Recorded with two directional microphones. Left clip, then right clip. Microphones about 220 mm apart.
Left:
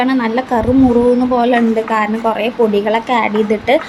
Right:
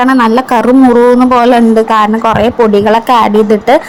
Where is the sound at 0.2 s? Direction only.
25° right (ahead or behind).